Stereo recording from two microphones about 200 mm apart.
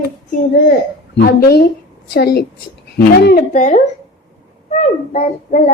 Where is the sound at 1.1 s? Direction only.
50° left (ahead or behind).